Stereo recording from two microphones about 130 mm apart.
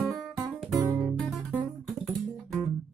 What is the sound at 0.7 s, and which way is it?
Music, 30° right (ahead or behind).